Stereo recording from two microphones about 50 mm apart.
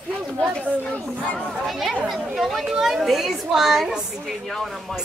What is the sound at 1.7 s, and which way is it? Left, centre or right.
A woman's voice, centre.